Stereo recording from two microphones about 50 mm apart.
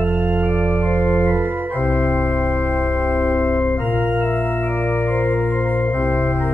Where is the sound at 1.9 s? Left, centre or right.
Left.